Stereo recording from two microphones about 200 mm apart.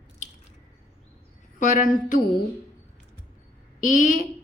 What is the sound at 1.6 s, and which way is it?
Speech, 40° left (ahead or behind).